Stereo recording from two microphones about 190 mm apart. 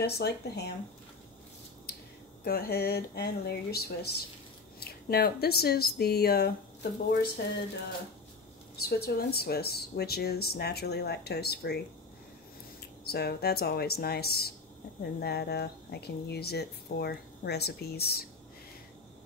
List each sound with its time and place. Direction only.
0.0 s speech: 60° left (ahead or behind)
1.9 s a sound: 55° left (ahead or behind)
2.4 s speech: 55° left (ahead or behind)
8.8 s speech: 55° left (ahead or behind)
13.0 s speech: 55° left (ahead or behind)